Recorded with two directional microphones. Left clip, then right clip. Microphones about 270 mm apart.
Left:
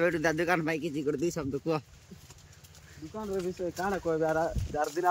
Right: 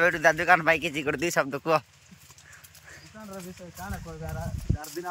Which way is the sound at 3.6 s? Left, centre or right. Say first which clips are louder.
Left 9 dB; left.